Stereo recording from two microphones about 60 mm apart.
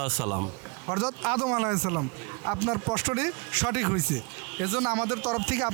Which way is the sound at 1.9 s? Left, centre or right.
Right.